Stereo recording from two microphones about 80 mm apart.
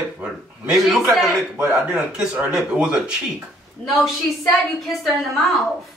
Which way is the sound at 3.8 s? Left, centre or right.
Centre.